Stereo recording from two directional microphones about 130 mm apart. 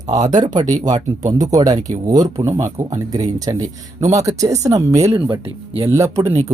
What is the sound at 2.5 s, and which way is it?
Speech, 60° right (ahead or behind).